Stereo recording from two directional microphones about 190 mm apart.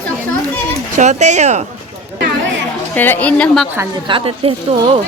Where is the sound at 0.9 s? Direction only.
40° right (ahead or behind).